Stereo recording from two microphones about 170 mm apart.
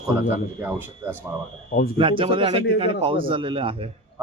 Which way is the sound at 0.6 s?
15° right (ahead or behind).